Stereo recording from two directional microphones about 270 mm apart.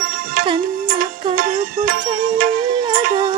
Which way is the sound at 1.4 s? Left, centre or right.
Right.